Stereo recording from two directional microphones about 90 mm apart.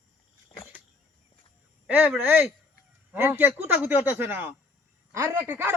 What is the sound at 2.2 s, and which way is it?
Speech, 20° right (ahead or behind).